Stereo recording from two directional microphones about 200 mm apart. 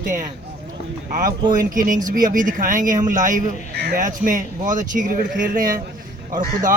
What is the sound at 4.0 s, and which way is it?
A man's voice, 40° right (ahead or behind).